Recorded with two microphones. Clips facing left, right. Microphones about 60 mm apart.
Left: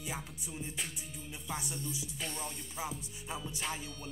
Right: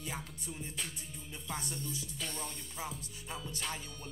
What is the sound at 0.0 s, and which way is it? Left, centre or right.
Music, centre.